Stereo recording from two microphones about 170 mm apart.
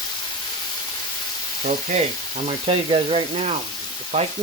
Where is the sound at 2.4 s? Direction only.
35° right (ahead or behind).